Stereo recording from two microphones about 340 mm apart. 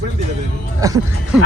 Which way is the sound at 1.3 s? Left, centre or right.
Centre.